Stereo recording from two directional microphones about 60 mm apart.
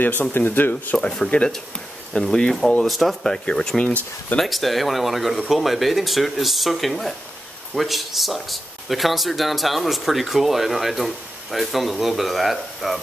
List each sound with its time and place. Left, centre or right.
0.0 s speech: left
1.3 s speech: left
2.1 s speech: centre
3.4 s speech: centre
4.4 s speech: centre